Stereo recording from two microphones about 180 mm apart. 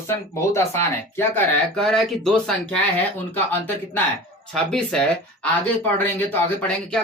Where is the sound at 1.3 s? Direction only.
5° left (ahead or behind).